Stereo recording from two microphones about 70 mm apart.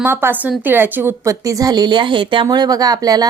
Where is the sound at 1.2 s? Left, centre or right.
Right.